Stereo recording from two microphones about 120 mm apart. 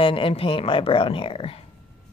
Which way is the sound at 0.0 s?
50° left (ahead or behind).